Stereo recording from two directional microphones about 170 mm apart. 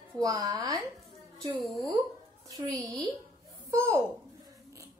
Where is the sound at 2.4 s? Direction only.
20° right (ahead or behind).